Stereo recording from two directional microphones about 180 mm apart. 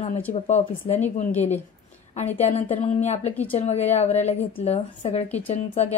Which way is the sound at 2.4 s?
35° left (ahead or behind).